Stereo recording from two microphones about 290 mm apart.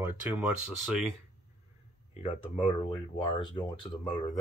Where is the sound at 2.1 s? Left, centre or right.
Left.